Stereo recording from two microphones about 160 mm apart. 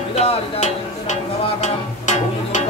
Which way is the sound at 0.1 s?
45° left (ahead or behind).